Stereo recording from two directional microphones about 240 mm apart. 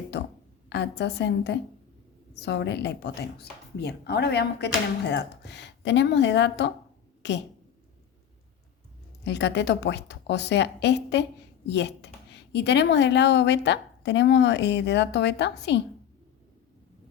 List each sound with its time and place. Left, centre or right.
0.7 s a woman's voice: left
9.2 s speech: left